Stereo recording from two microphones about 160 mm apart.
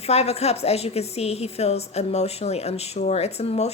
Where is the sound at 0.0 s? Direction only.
40° left (ahead or behind).